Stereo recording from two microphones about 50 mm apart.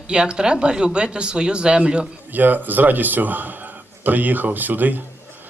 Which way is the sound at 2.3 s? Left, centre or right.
Right.